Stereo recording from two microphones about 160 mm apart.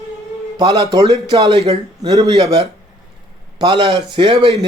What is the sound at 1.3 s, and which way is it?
Speech, 40° right (ahead or behind).